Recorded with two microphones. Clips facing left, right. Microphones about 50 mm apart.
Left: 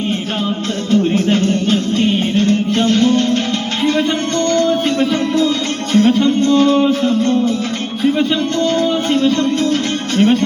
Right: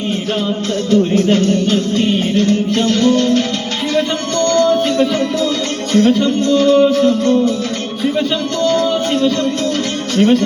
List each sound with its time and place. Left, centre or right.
0.9 s music: centre
10.2 s speech: centre